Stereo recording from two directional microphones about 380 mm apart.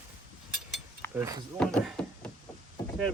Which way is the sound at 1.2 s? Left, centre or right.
Centre.